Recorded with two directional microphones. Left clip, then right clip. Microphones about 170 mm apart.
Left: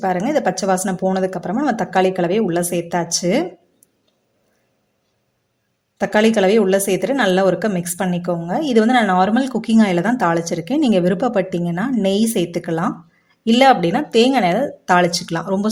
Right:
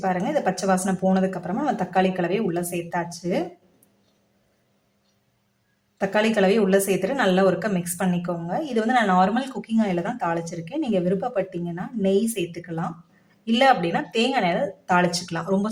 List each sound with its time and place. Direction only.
0.0 s a woman's voice: 35° left (ahead or behind)
6.0 s a woman's voice: 35° left (ahead or behind)